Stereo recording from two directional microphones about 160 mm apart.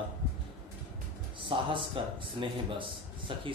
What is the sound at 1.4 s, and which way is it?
Speech, 30° right (ahead or behind).